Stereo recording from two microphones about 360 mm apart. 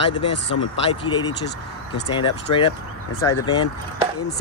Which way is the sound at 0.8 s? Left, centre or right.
Centre.